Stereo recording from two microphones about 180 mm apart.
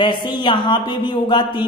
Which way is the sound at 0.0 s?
25° left (ahead or behind).